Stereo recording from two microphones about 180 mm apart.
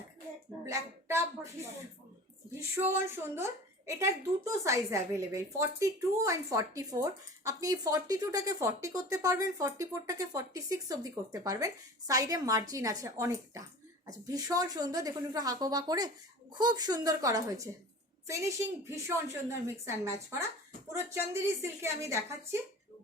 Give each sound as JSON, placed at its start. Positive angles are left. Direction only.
{"t": 0.6, "sound": "a woman's voice", "side_deg": -15}